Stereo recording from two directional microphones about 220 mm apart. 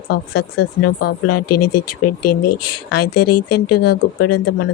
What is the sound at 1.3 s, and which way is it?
Speech, 90° left.